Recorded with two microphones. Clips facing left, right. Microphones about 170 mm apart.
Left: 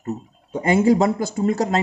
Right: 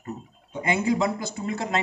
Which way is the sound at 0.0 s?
45° left (ahead or behind).